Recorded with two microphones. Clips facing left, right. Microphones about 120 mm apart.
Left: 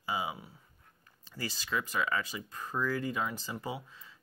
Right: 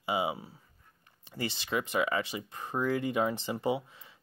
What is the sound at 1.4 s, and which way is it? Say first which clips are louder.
Speech: right 3 dB; 25° right (ahead or behind).